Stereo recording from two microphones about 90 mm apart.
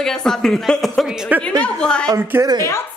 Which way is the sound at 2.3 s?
25° right (ahead or behind).